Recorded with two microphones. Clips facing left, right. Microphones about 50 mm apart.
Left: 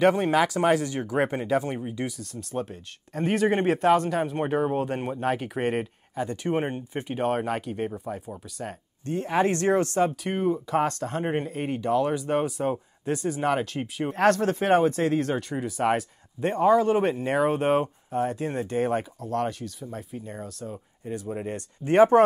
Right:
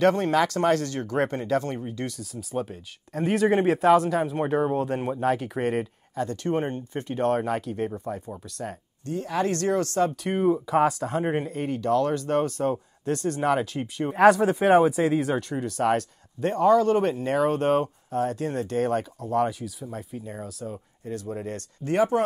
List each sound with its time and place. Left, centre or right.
0.0 s speech: centre
2.1 s speech: centre
9.0 s speech: left
10.2 s speech: centre
14.1 s speech: centre
19.2 s speech: centre
21.0 s speech: centre
21.9 s speech: left